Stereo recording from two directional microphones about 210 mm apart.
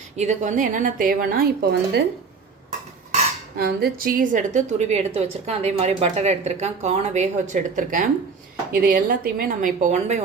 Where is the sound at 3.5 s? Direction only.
45° right (ahead or behind).